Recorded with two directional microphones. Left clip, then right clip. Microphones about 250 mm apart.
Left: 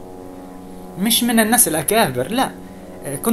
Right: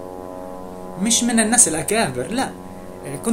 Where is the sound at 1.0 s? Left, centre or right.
Centre.